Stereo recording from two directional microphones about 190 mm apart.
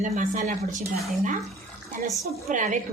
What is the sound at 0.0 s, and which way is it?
Speech, 40° right (ahead or behind).